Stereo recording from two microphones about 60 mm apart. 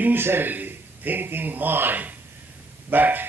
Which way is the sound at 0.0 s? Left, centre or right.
Right.